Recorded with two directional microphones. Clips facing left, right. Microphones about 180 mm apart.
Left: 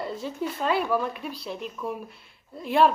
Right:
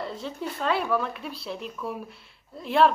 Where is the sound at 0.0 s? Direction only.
5° left (ahead or behind).